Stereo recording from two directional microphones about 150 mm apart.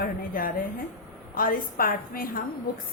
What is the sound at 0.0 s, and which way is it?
A woman's voice, 70° left (ahead or behind).